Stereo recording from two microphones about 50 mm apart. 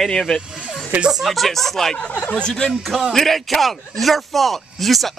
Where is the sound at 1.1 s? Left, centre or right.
Centre.